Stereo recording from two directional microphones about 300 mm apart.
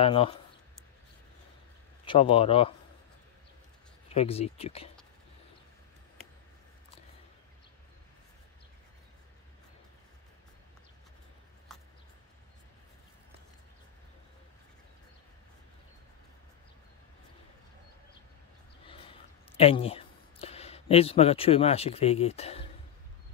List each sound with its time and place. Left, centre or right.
0.0 s speech: centre
2.0 s speech: centre
4.1 s speech: left
18.9 s a sound: centre